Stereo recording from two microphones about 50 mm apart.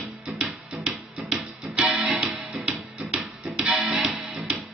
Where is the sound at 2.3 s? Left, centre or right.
Right.